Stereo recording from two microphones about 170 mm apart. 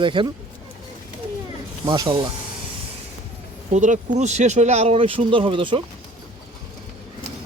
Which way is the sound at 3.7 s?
45° right (ahead or behind).